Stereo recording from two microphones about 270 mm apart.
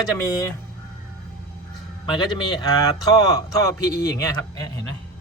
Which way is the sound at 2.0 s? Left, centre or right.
Centre.